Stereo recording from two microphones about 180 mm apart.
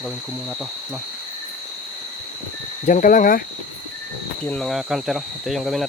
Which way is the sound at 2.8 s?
45° left (ahead or behind).